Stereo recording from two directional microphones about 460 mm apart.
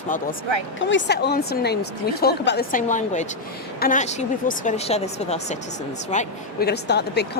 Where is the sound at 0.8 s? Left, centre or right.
Left.